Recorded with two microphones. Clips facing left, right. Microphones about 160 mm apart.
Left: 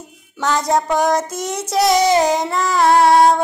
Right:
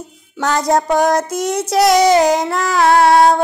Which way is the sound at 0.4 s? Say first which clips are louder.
Right 2 dB; 65° right (ahead or behind).